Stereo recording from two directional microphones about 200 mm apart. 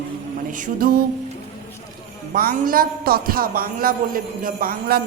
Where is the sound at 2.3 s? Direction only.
45° right (ahead or behind).